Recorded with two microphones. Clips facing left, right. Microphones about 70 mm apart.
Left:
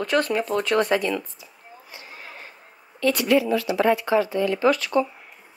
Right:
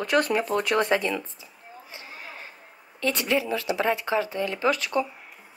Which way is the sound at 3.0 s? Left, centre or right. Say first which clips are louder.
Left 5 dB; right.